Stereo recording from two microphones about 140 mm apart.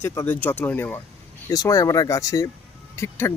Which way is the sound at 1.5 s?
25° left (ahead or behind).